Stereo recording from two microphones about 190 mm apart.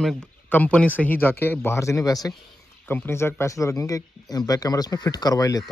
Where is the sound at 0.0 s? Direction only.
5° left (ahead or behind).